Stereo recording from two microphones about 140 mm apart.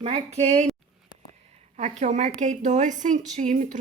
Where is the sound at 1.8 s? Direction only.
55° right (ahead or behind).